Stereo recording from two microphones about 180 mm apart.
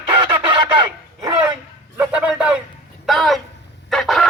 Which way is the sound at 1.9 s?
5° right (ahead or behind).